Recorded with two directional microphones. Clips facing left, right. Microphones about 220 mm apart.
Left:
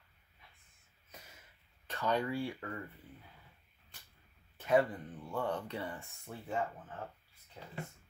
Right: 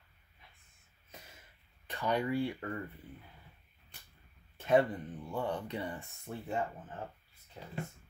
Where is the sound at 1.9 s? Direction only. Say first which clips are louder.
Right 1 dB; 15° right (ahead or behind).